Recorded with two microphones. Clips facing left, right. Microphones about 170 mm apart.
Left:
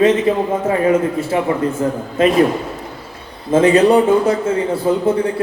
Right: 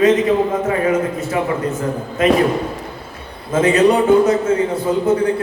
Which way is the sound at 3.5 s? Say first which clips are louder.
Left 2 dB; 30° left (ahead or behind).